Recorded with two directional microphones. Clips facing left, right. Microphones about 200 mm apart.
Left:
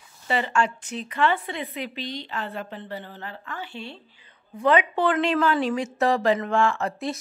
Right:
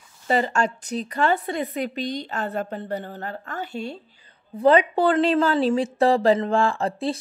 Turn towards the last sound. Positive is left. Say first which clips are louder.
# right 3 dB
turn(degrees=-30)  # may be behind; listen again after turning